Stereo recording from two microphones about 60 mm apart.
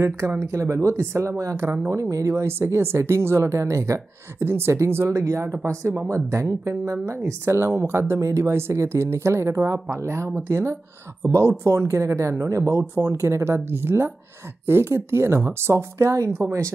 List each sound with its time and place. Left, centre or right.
0.5 s speech: right